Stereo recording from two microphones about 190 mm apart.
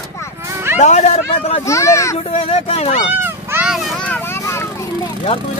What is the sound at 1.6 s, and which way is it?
Speech, 15° left (ahead or behind).